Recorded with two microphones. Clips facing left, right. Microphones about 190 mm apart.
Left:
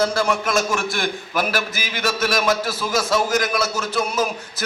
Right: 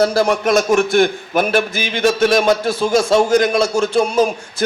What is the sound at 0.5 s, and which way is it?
Speech, 55° right (ahead or behind).